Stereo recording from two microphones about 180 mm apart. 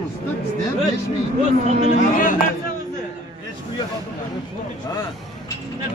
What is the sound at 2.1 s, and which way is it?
Speech, 45° left (ahead or behind).